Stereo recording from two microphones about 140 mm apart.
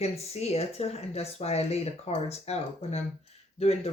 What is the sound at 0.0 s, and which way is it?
Speech, 50° left (ahead or behind).